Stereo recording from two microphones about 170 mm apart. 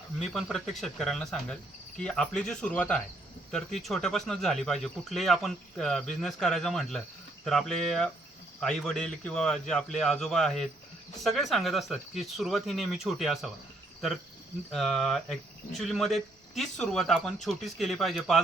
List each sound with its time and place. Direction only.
0.2 s speech: centre (ahead or behind)
14.7 s speech: centre (ahead or behind)